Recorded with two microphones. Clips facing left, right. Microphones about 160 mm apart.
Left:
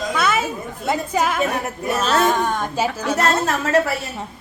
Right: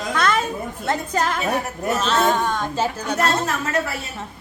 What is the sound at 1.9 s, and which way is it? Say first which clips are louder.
Speech: left 2 dB; 5° left (ahead or behind).